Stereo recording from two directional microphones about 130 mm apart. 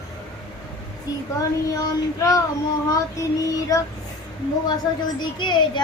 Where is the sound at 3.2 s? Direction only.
25° left (ahead or behind).